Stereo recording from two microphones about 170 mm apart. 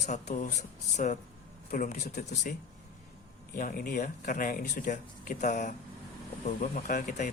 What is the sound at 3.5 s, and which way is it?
Speech, 55° left (ahead or behind).